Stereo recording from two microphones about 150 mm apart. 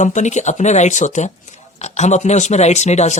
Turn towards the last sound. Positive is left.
turn(degrees=50)  # may be behind; listen again after turning